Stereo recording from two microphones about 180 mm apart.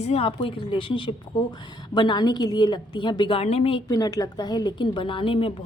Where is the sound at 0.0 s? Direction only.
35° left (ahead or behind).